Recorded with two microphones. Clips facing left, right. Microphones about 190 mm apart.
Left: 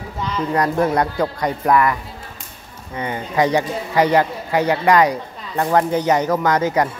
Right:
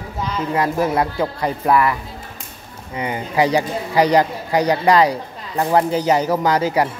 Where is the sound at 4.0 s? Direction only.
35° right (ahead or behind).